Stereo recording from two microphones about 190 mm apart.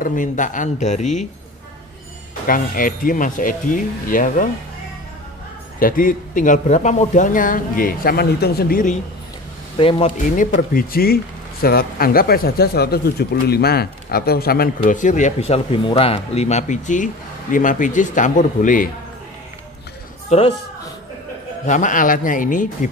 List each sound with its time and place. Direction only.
0.0 s a man's voice: 45° left (ahead or behind)
2.4 s speech: 50° left (ahead or behind)
5.8 s speech: 45° left (ahead or behind)
9.8 s speech: 30° left (ahead or behind)
10.1 s speech: 40° left (ahead or behind)
20.2 s speech: 30° left (ahead or behind)
21.6 s speech: 40° left (ahead or behind)